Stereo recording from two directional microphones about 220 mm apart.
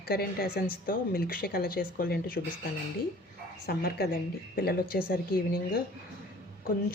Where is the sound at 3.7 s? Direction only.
45° left (ahead or behind).